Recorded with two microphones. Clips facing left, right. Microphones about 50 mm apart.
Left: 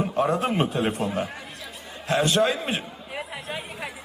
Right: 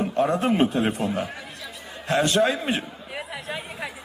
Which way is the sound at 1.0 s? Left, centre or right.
Centre.